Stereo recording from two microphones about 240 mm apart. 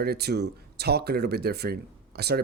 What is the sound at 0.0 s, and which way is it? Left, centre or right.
Speech, right.